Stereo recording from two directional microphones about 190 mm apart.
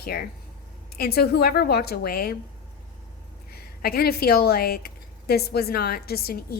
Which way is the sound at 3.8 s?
55° left (ahead or behind).